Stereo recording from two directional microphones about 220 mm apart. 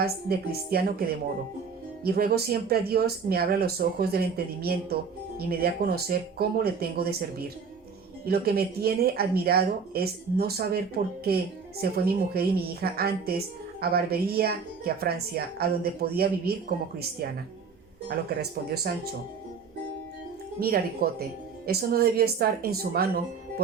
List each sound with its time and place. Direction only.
0.0 s speech: 45° right (ahead or behind)
18.3 s speech: 45° right (ahead or behind)
20.6 s speech: 45° right (ahead or behind)